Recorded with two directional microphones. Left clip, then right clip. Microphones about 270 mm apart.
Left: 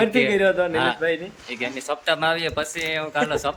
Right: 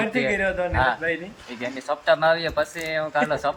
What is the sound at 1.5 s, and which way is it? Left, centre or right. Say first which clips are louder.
Speech: left 1 dB; centre.